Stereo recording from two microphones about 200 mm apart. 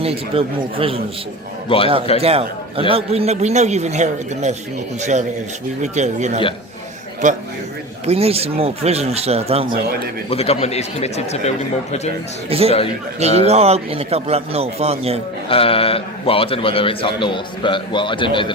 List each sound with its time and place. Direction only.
0.0 s speech: 30° right (ahead or behind)
1.7 s a man's voice: 25° left (ahead or behind)
2.2 s a man's voice: 30° right (ahead or behind)
10.2 s speech: 30° left (ahead or behind)
12.5 s a man's voice: 30° right (ahead or behind)
15.4 s a man's voice: 25° left (ahead or behind)